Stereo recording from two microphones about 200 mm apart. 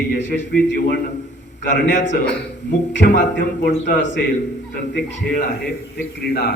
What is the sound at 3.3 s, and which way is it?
A man's voice, 55° left (ahead or behind).